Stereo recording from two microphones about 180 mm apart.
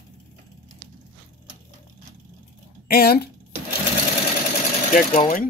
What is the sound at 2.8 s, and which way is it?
Speech, 60° left (ahead or behind).